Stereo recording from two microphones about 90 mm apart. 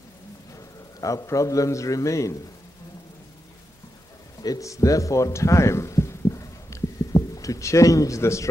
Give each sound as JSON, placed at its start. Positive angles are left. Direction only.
{"t": 0.6, "sound": "a man's voice", "side_deg": 35}
{"t": 4.4, "sound": "speech", "side_deg": 40}